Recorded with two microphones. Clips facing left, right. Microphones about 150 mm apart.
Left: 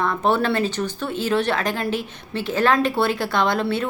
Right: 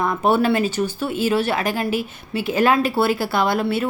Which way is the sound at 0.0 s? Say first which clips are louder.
Right 2 dB; 10° right (ahead or behind).